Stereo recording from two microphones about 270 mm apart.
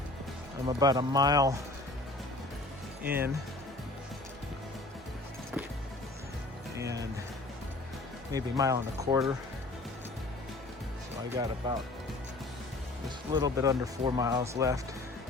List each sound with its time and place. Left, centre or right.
0.7 s speech: centre
3.0 s speech: centre
6.7 s speech: centre
8.3 s speech: centre
11.6 s speech: centre
13.3 s speech: centre